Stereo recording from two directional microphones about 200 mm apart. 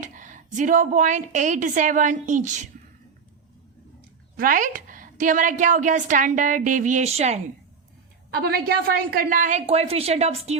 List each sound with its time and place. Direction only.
0.0 s a woman's voice: 40° right (ahead or behind)
4.4 s a woman's voice: 45° right (ahead or behind)
8.4 s a woman's voice: 50° right (ahead or behind); by 10.6 s 30° right (ahead or behind)